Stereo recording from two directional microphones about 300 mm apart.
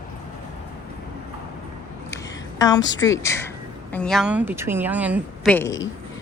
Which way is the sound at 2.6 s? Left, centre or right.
Centre.